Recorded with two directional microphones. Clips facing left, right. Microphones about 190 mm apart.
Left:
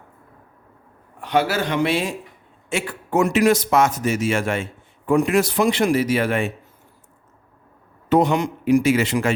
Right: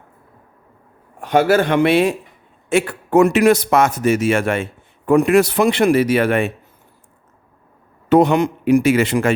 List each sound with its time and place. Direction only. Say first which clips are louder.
1.2 s a man's voice: right 6 dB; 50° right (ahead or behind)
8.1 s a man's voice: right 5 dB; 60° right (ahead or behind)